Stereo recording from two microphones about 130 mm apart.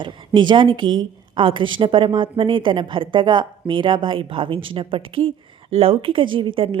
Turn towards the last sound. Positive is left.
turn(degrees=-40)  # may be behind; listen again after turning